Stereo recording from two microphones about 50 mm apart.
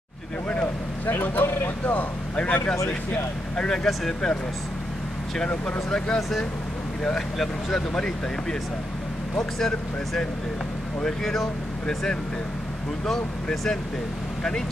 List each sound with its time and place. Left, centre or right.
1.0 s speech: left
1.9 s speech: left
3.5 s speech: centre
5.9 s speech: centre
9.6 s speech: centre
13.0 s speech: centre